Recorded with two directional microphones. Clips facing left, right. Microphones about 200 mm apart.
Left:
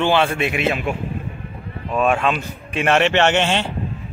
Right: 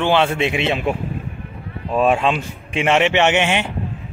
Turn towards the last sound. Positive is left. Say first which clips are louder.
# even
turn(degrees=-15)  # may be behind; listen again after turning